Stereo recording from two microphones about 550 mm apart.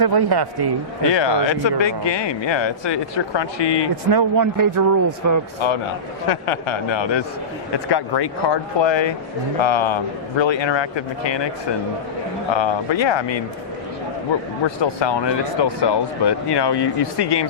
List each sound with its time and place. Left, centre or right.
0.0 s a man's voice: right
1.0 s speech: left
4.1 s a man's voice: right
6.2 s a man's voice: left
12.5 s speech: left
14.8 s speech: left